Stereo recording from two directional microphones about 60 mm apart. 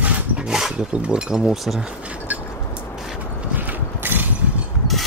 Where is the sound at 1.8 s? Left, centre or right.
Right.